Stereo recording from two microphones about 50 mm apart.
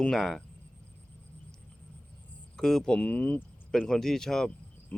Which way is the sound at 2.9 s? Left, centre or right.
Left.